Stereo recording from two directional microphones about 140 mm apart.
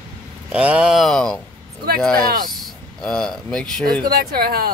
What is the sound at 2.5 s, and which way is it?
Speech, 5° left (ahead or behind).